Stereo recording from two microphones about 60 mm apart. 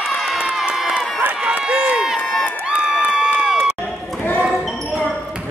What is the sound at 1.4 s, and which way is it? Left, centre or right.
Run, centre.